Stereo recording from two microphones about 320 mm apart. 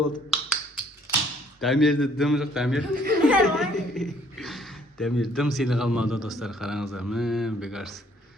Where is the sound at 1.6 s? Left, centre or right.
Centre.